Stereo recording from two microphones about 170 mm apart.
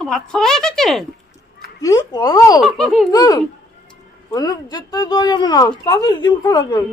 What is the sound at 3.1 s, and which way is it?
A woman's voice, 25° left (ahead or behind).